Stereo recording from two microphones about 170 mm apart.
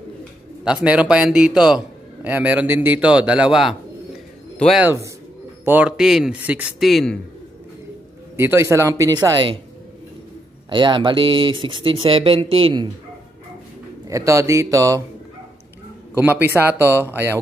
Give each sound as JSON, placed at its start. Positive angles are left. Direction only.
{"t": 0.7, "sound": "a man's voice", "side_deg": -5}
{"t": 4.8, "sound": "a man's voice", "side_deg": -15}
{"t": 8.4, "sound": "speech", "side_deg": -15}
{"t": 10.7, "sound": "speech", "side_deg": -30}
{"t": 14.0, "sound": "speech", "side_deg": -20}
{"t": 16.2, "sound": "speech", "side_deg": -10}